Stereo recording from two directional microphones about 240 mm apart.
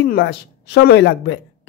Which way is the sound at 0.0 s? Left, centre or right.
Left.